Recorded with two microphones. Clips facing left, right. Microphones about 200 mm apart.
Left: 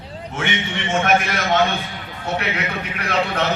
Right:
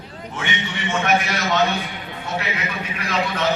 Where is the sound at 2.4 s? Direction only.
65° left (ahead or behind).